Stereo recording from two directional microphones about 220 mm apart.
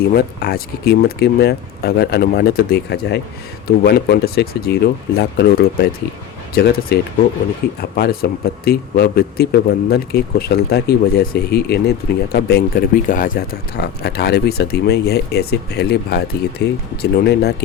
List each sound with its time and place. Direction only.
0.0 s speech: 45° left (ahead or behind)
7.8 s speech: 45° left (ahead or behind)